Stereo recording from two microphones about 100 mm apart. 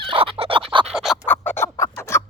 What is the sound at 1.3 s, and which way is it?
Bird, 20° left (ahead or behind).